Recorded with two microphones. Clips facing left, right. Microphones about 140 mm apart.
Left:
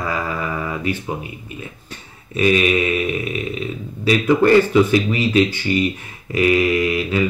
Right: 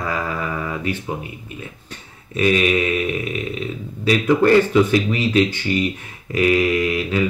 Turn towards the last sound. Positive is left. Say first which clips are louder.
# left 1 dB
turn(degrees=5)  # may be behind; listen again after turning